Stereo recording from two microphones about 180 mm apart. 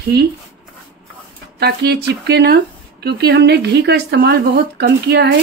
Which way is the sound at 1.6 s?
65° right (ahead or behind).